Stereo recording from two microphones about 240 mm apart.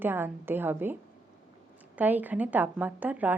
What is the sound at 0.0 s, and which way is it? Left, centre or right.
Speech, centre.